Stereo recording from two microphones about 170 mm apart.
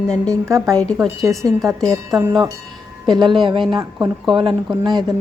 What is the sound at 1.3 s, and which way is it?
Speech, 20° right (ahead or behind).